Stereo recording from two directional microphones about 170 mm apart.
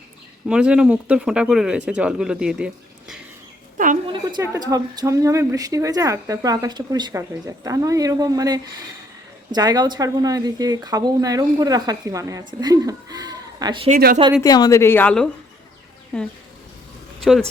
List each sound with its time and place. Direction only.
0.4 s speech: 5° right (ahead or behind)
4.0 s speech: 25° right (ahead or behind)
13.9 s speech: 60° right (ahead or behind)
14.4 s a woman's voice: 20° left (ahead or behind); by 16.3 s 5° left (ahead or behind)